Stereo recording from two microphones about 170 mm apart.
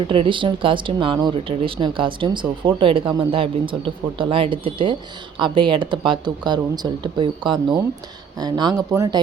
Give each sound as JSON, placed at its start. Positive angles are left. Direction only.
{"t": 0.1, "sound": "speech", "side_deg": -30}